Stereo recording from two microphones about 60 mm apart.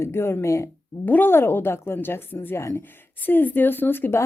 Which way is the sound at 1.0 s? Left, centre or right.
Left.